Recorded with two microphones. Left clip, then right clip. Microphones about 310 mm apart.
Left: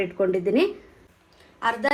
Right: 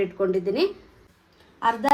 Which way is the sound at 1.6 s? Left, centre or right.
Right.